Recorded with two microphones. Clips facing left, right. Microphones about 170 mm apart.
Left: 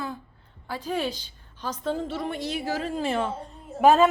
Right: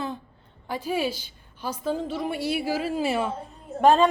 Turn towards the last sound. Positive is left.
turn(degrees=5)  # may be behind; listen again after turning